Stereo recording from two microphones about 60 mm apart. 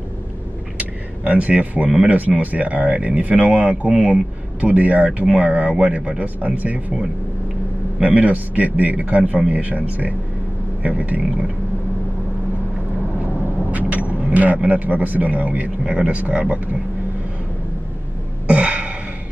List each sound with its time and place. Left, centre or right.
0.7 s speech: right
13.7 s speech: right
18.5 s a sound: centre